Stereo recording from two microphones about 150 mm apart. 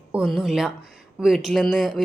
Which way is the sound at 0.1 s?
Centre (ahead or behind).